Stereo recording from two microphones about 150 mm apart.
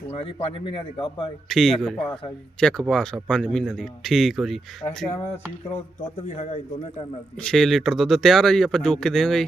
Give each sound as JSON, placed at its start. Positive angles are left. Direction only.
{"t": 0.6, "sound": "speech", "side_deg": 35}
{"t": 1.5, "sound": "a man's voice", "side_deg": 0}
{"t": 6.2, "sound": "speech", "side_deg": 50}
{"t": 7.4, "sound": "a man's voice", "side_deg": 5}